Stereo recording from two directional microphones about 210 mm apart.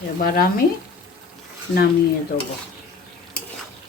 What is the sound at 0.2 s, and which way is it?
Speech, 45° left (ahead or behind).